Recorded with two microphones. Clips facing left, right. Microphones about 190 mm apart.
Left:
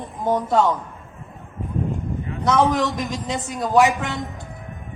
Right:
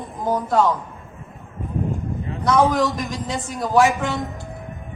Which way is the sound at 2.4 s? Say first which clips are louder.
Right 1 dB; 20° left (ahead or behind).